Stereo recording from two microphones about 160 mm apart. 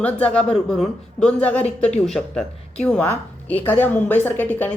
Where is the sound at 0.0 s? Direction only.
10° left (ahead or behind).